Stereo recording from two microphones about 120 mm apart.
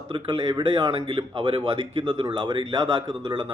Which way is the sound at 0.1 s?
45° right (ahead or behind).